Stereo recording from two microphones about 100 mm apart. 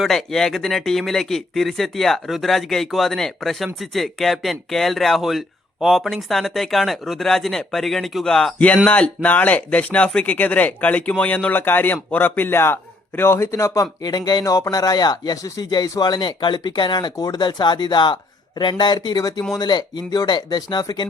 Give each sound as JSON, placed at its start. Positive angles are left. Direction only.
{"t": 0.0, "sound": "a man's voice", "side_deg": 0}
{"t": 14.0, "sound": "speech", "side_deg": 45}